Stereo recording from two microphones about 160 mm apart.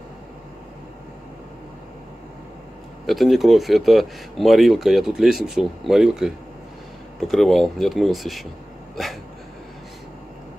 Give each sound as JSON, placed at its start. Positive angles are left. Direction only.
{"t": 3.1, "sound": "speech", "side_deg": 0}